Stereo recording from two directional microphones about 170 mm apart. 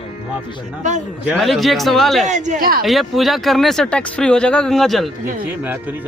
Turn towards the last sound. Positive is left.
turn(degrees=-10)  # may be behind; listen again after turning